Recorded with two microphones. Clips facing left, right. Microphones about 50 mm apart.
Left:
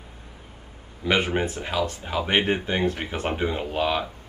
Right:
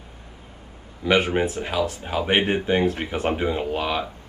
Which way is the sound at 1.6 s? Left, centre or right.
Right.